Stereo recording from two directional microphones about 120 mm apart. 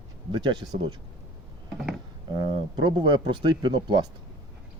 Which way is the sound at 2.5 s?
35° right (ahead or behind).